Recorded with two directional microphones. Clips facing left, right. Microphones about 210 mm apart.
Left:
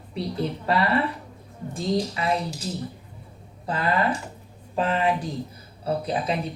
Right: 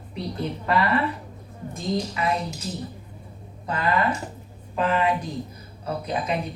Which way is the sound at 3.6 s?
30° left (ahead or behind).